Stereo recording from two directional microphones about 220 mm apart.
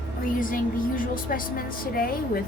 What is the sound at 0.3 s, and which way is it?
A woman's voice, 40° left (ahead or behind).